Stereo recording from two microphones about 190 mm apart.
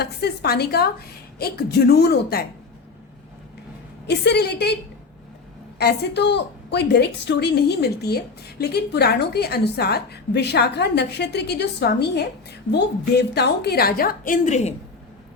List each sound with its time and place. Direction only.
0.0 s a woman's voice: 60° left (ahead or behind)
4.0 s a woman's voice: 60° left (ahead or behind)
5.8 s a woman's voice: 60° left (ahead or behind); by 14.7 s 40° left (ahead or behind)